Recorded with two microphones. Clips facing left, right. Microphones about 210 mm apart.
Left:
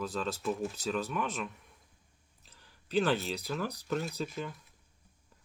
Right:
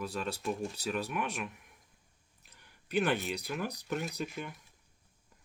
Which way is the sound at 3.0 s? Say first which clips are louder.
Left 1 dB; 15° right (ahead or behind).